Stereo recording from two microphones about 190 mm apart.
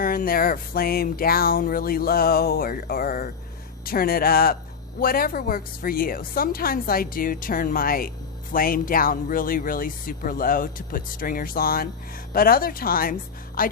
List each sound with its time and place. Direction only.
0.0 s speech: 50° left (ahead or behind)